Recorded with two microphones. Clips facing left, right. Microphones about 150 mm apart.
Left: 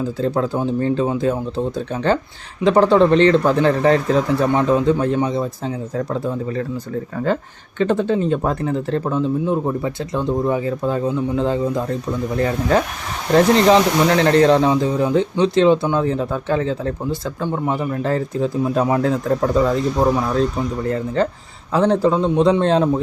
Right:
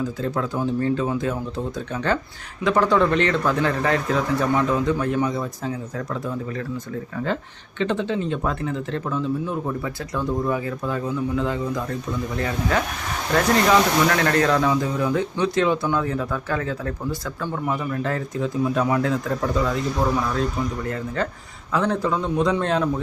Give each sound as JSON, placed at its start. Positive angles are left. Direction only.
{"t": 0.2, "sound": "speech", "side_deg": 30}
{"t": 7.8, "sound": "speech", "side_deg": 45}
{"t": 20.8, "sound": "speech", "side_deg": 30}